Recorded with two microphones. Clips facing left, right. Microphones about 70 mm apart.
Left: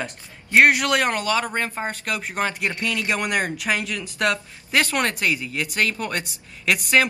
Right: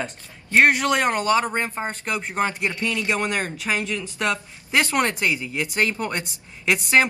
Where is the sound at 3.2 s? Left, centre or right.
Centre.